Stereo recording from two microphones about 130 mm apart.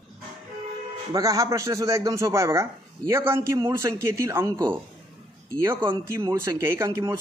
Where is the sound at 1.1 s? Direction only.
25° right (ahead or behind).